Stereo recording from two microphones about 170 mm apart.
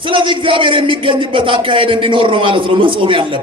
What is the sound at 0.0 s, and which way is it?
A man's voice, 30° right (ahead or behind).